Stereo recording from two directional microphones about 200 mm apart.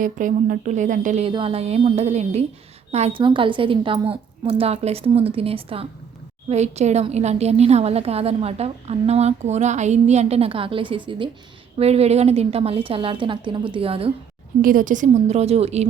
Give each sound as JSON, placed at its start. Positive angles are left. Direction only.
{"t": 0.0, "sound": "a woman's voice", "side_deg": -40}
{"t": 1.3, "sound": "a woman's voice", "side_deg": -25}
{"t": 14.6, "sound": "a woman's voice", "side_deg": -45}